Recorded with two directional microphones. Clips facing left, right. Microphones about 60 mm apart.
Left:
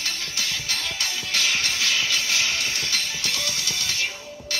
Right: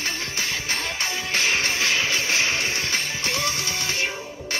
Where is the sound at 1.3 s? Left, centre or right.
Right.